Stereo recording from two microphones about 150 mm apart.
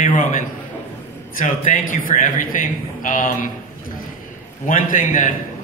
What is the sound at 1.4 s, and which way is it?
A man's voice, 60° left (ahead or behind).